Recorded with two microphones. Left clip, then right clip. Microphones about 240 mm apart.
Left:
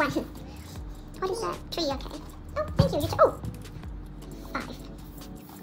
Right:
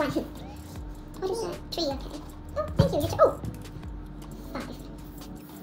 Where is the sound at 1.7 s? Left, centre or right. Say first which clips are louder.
Right 2 dB; centre.